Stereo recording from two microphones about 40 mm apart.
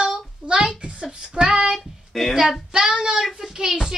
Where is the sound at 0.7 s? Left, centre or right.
Right.